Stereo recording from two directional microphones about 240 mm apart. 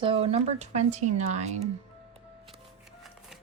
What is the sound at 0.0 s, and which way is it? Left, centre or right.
Speech, right.